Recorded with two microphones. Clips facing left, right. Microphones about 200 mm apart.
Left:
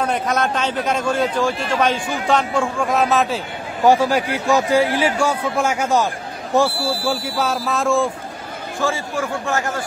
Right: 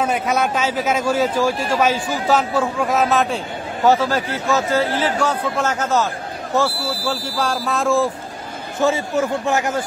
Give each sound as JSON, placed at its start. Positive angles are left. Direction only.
{"t": 0.0, "sound": "a man's voice", "side_deg": -5}
{"t": 3.8, "sound": "a man's voice", "side_deg": 15}
{"t": 6.8, "sound": "speech", "side_deg": 25}
{"t": 7.3, "sound": "speech", "side_deg": 0}
{"t": 8.8, "sound": "a man's voice", "side_deg": -20}